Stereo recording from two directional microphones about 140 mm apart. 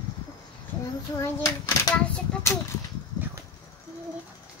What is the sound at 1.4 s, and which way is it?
Speech, 25° left (ahead or behind).